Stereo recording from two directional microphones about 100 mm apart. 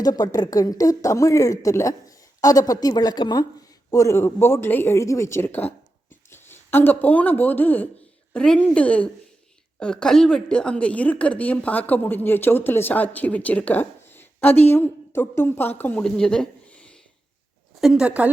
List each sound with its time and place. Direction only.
0.0 s a woman's voice: 40° left (ahead or behind)
3.9 s a woman's voice: 30° left (ahead or behind); by 16.9 s 10° left (ahead or behind)
17.7 s a woman's voice: 5° right (ahead or behind)